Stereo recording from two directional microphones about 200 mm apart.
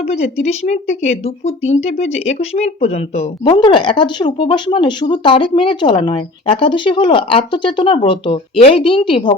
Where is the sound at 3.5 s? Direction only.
20° left (ahead or behind).